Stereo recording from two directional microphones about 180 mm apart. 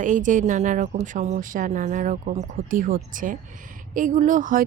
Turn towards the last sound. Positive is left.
turn(degrees=-45)  # may be behind; listen again after turning